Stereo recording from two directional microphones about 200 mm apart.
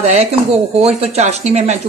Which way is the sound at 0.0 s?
30° right (ahead or behind).